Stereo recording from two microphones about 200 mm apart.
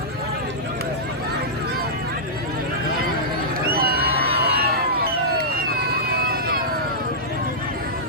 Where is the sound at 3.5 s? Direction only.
50° right (ahead or behind).